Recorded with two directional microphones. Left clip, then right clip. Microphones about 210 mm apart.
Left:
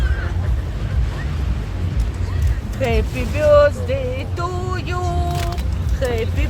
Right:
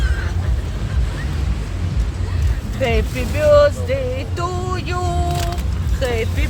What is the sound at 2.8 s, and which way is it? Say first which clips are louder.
Music: right 1 dB; 10° right (ahead or behind).